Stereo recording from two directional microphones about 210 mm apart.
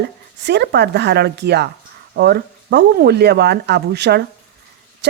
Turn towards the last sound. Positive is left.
turn(degrees=-55)  # may be behind; listen again after turning